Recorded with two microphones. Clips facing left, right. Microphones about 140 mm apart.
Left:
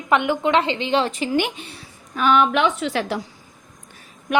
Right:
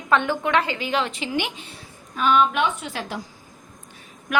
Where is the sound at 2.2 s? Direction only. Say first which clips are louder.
Left 2 dB; 70° left (ahead or behind).